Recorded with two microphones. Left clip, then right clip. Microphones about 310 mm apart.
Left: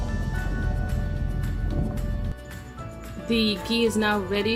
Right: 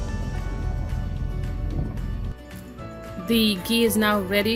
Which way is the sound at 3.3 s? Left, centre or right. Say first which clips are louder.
Right 2 dB; right.